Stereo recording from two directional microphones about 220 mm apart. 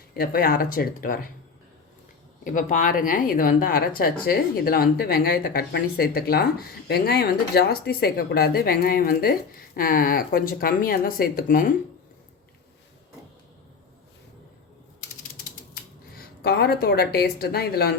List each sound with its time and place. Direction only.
0.2 s speech: 40° left (ahead or behind)
2.4 s speech: 35° left (ahead or behind)
15.7 s speech: 45° left (ahead or behind)